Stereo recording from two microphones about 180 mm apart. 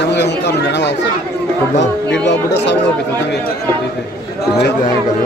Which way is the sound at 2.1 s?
75° left (ahead or behind).